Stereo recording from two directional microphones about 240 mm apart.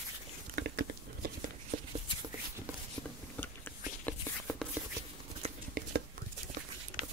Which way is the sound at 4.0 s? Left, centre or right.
Centre.